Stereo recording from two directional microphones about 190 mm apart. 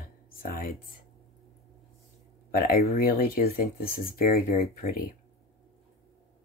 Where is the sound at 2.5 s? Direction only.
50° left (ahead or behind).